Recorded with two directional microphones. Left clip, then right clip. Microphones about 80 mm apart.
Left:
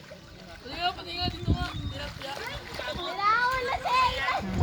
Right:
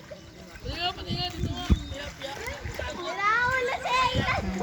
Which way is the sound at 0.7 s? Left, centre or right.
Right.